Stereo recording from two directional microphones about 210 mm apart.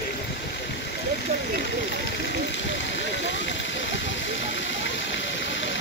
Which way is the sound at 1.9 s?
55° left (ahead or behind).